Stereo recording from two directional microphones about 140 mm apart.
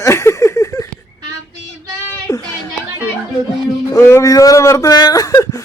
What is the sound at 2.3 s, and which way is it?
Guitar, 20° left (ahead or behind).